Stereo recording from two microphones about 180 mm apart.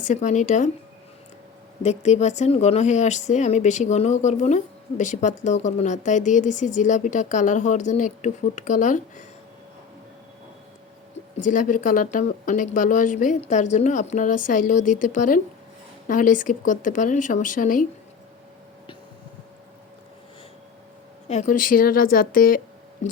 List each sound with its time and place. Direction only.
0.0 s speech: 45° left (ahead or behind)
1.8 s speech: 40° left (ahead or behind)
11.4 s speech: 45° left (ahead or behind)
21.2 s speech: 40° left (ahead or behind)